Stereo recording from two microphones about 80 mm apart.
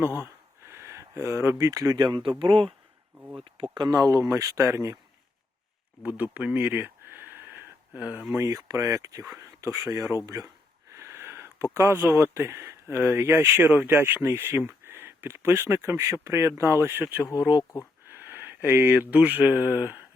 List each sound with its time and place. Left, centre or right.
0.7 s speech: right
2.0 s speech: right
2.4 s speech: right
3.6 s speech: right
3.9 s speech: right
6.0 s a sound: centre
8.3 s speech: right
10.9 s speech: right
19.8 s a sound: right